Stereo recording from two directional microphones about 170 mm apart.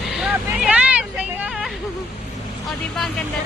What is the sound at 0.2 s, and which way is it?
Vehicle, 5° right (ahead or behind).